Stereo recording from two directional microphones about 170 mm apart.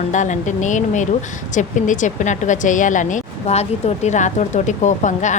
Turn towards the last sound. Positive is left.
turn(degrees=45)  # may be behind; listen again after turning